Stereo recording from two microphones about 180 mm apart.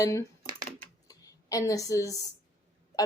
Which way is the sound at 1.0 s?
20° left (ahead or behind).